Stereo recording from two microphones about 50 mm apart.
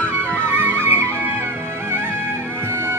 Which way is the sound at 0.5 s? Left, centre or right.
Right.